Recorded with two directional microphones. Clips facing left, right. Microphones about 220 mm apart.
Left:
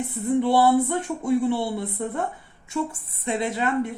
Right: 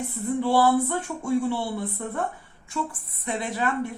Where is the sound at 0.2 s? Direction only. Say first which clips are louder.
Left 2 dB; 20° left (ahead or behind).